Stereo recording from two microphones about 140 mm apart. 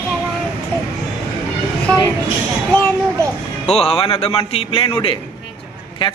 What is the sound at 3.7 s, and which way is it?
A man's voice, 45° left (ahead or behind).